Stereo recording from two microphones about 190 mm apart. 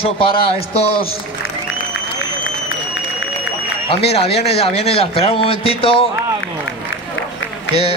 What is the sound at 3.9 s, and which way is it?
A man's voice, 30° left (ahead or behind).